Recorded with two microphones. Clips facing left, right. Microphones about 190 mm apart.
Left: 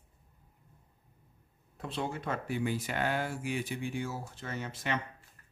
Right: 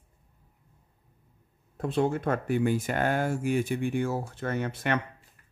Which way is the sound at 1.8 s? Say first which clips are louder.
Right 10 dB; 50° right (ahead or behind).